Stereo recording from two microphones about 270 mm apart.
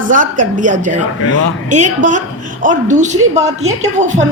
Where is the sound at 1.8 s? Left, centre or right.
Right.